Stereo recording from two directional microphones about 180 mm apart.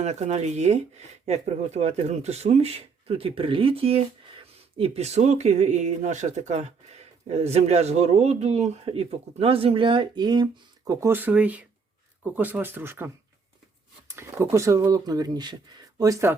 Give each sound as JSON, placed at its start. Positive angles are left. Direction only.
{"t": 0.0, "sound": "speech", "side_deg": -40}
{"t": 14.5, "sound": "speech", "side_deg": -15}